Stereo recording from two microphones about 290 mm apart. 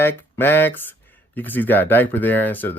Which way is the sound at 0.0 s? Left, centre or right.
Centre.